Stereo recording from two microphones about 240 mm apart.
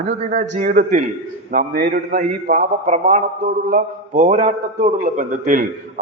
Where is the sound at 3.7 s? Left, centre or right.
Right.